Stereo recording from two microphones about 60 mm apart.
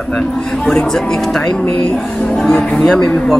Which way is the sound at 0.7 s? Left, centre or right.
Centre.